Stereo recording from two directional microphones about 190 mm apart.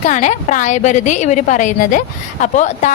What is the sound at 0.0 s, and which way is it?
A woman's voice, 40° left (ahead or behind).